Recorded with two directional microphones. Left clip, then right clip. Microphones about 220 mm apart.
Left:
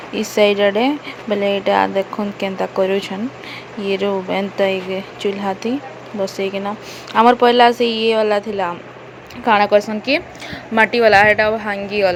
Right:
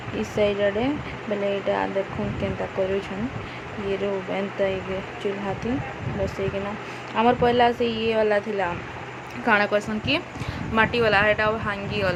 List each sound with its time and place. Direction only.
0.2 s speech: 20° left (ahead or behind)
7.2 s speech: 20° left (ahead or behind)